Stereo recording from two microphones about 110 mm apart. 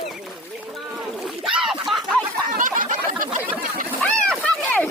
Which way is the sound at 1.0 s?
5° right (ahead or behind).